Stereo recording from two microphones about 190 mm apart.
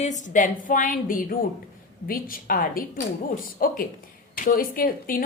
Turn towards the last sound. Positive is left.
turn(degrees=50)  # may be behind; listen again after turning